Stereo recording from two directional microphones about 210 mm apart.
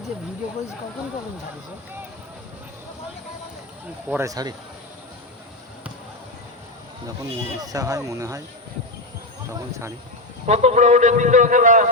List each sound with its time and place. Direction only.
4.1 s speech: 15° right (ahead or behind)
7.6 s speech: 15° right (ahead or behind)
9.5 s speech: 15° right (ahead or behind)
10.4 s a man's voice: 30° right (ahead or behind)